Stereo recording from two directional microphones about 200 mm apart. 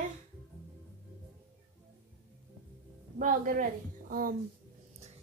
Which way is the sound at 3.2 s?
45° right (ahead or behind).